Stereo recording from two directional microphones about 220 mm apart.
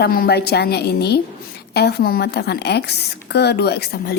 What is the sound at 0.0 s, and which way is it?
A woman's voice, 45° left (ahead or behind).